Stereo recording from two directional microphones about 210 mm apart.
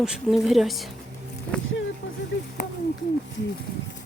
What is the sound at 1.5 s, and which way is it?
Vehicle, 5° left (ahead or behind).